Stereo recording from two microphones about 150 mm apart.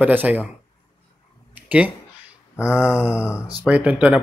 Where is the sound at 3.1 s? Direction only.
20° left (ahead or behind).